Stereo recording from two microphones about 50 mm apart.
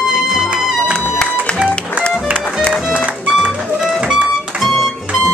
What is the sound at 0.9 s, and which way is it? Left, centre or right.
Music, centre.